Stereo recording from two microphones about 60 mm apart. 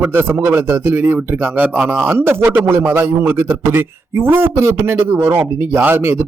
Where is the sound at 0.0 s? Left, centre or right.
Right.